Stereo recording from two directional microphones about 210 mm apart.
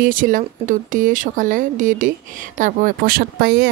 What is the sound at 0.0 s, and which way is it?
Speech, 40° right (ahead or behind).